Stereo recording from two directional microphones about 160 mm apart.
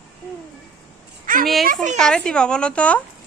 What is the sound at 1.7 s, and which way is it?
Speech, 50° right (ahead or behind).